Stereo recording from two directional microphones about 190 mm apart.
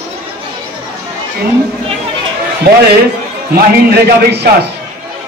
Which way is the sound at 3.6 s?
55° right (ahead or behind).